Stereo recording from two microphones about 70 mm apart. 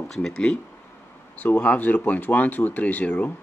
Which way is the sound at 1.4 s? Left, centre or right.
Left.